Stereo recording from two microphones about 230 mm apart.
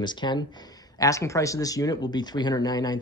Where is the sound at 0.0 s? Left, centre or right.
Centre.